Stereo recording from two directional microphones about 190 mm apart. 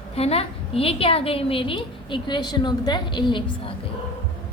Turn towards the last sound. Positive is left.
turn(degrees=25)  # may be behind; listen again after turning